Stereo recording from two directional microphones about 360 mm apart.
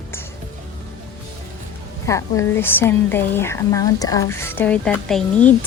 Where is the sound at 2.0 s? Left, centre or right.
Centre.